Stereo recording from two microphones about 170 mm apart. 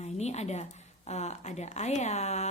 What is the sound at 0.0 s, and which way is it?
A woman's voice, 40° left (ahead or behind).